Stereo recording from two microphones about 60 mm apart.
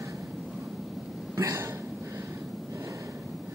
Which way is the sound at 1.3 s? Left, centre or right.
Right.